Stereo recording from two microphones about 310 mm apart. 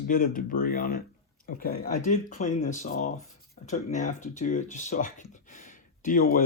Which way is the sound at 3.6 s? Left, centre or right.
Left.